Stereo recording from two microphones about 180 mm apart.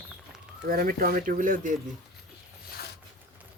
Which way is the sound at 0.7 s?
55° right (ahead or behind).